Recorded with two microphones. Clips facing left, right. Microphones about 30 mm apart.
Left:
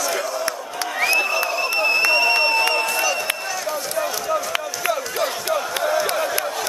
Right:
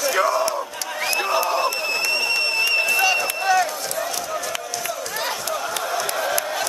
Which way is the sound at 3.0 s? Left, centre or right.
Right.